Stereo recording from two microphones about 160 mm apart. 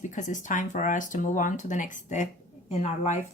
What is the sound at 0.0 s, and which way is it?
Speech, 50° left (ahead or behind).